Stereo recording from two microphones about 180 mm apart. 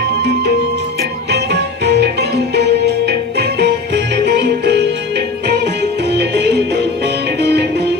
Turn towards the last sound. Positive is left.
turn(degrees=-70)  # may be behind; listen again after turning